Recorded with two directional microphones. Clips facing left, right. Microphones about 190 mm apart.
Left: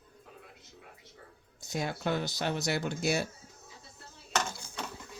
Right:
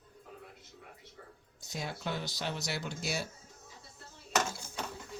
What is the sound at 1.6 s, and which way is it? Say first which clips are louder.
Speech: left 6 dB; 50° left (ahead or behind).